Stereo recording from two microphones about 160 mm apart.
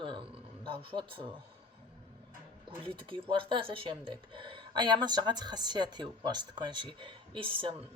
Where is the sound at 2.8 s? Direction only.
35° right (ahead or behind).